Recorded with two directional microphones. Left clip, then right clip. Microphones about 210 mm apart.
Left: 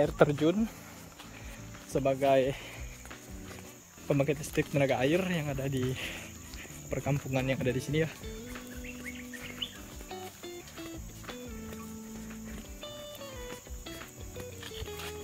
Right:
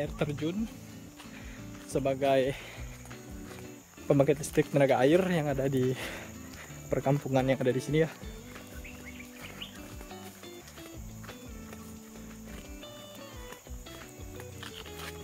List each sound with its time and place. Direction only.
0.0 s speech: 20° left (ahead or behind)
1.9 s speech: 10° right (ahead or behind)
4.1 s speech: 20° right (ahead or behind)